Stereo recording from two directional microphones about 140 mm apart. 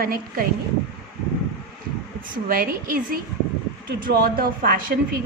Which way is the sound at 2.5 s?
90° right.